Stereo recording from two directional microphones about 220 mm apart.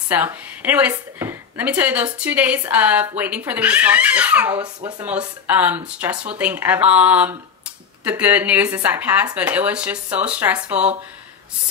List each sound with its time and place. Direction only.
0.1 s speech: 10° right (ahead or behind)